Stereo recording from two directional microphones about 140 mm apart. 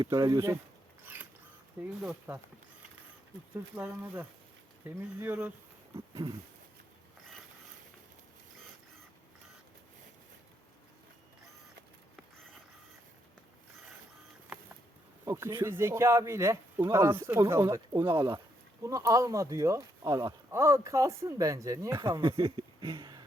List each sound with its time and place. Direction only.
0.0 s speech: 30° right (ahead or behind)
1.0 s a sound: 10° right (ahead or behind)
2.0 s speech: 5° right (ahead or behind)
3.5 s speech: 10° right (ahead or behind)
15.2 s speech: 20° right (ahead or behind)
22.2 s speech: 35° right (ahead or behind)